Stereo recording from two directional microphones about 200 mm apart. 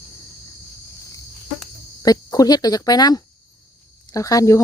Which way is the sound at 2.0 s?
20° left (ahead or behind).